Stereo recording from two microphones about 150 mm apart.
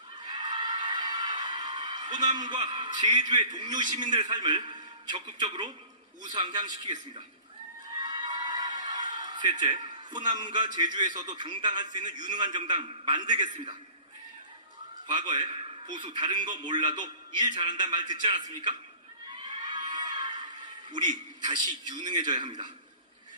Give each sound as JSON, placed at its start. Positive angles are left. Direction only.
{"t": 0.2, "sound": "music", "side_deg": -30}
{"t": 4.0, "sound": "a man's voice", "side_deg": -30}
{"t": 7.9, "sound": "speech", "side_deg": -30}
{"t": 15.1, "sound": "a man's voice", "side_deg": -30}
{"t": 19.4, "sound": "a sound", "side_deg": -30}
{"t": 20.9, "sound": "a man's voice", "side_deg": -30}